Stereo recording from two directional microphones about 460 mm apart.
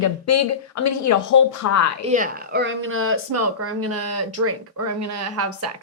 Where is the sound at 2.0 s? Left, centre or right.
Centre.